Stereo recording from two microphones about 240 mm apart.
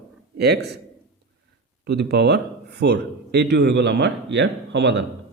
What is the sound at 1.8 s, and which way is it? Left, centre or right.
A man's voice, right.